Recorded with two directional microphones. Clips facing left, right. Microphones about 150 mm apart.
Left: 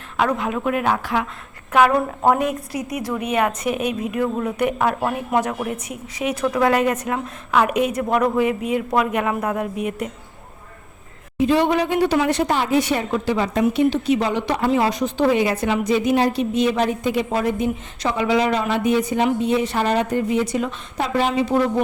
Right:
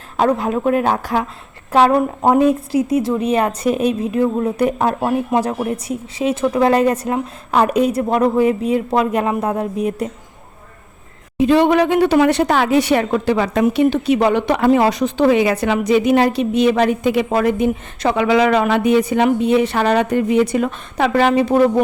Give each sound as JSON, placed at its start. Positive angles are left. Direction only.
{"t": 0.2, "sound": "a woman's voice", "side_deg": -35}
{"t": 2.0, "sound": "a woman's voice", "side_deg": -20}
{"t": 11.3, "sound": "a woman's voice", "side_deg": -65}